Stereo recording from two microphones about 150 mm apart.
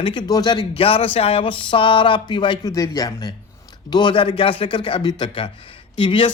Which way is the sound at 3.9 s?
35° left (ahead or behind).